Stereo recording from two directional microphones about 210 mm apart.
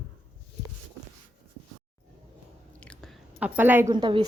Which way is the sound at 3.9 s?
20° right (ahead or behind).